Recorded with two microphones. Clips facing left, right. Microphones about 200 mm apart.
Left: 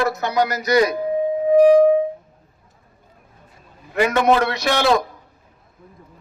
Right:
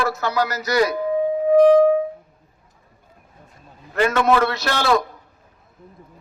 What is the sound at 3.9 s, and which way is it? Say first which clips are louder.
A man's voice: left 1 dB; 15° left (ahead or behind).